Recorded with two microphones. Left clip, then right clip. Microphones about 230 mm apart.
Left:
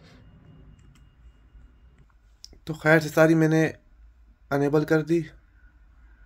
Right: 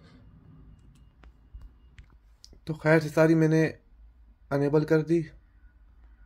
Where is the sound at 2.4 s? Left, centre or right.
Centre.